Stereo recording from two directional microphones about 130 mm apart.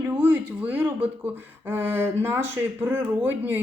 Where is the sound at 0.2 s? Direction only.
10° right (ahead or behind).